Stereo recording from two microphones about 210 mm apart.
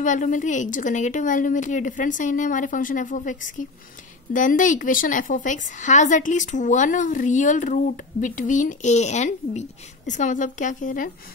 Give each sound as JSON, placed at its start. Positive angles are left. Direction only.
{"t": 0.0, "sound": "a woman's voice", "side_deg": 35}